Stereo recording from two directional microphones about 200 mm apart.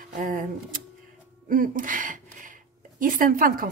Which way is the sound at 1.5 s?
45° right (ahead or behind).